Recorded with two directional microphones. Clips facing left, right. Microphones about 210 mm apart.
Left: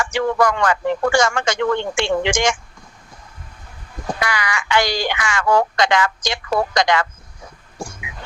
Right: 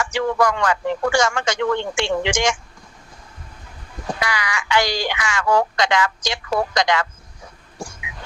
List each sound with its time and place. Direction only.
0.0 s speech: 55° left (ahead or behind)
4.2 s speech: 55° left (ahead or behind)